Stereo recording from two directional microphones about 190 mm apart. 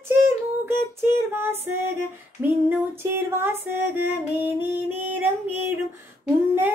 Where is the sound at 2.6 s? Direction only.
10° right (ahead or behind).